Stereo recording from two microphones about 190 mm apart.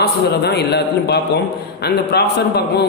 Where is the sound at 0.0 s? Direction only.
60° left (ahead or behind).